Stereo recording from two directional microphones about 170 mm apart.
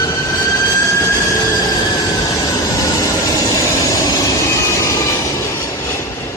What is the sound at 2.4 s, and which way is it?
Train, 20° left (ahead or behind).